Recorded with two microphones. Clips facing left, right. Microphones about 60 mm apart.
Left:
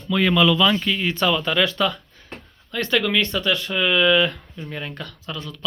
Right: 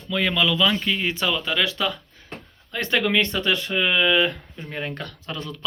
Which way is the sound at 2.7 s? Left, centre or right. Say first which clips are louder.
Left 1 dB; right.